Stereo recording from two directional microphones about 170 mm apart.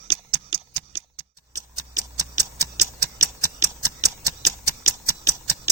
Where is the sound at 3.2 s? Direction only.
20° right (ahead or behind).